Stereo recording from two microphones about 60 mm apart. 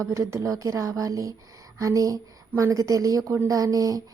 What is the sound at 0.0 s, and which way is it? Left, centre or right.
A woman's voice, right.